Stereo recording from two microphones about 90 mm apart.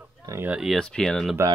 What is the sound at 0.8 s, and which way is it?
Speech, 10° left (ahead or behind).